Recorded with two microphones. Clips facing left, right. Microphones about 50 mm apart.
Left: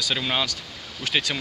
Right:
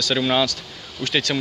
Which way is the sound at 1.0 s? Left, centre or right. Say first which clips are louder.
Right 2 dB; centre.